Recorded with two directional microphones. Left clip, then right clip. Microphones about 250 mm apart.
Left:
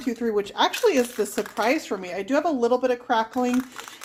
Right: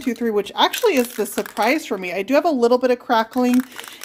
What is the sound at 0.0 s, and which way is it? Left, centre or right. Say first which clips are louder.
Speech: right 4 dB; right.